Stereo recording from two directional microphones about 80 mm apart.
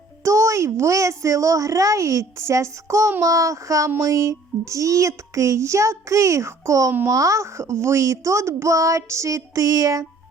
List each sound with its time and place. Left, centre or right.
0.3 s a child's voice: right